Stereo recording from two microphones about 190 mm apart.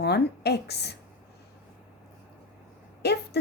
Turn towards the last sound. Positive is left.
turn(degrees=60)  # may be behind; listen again after turning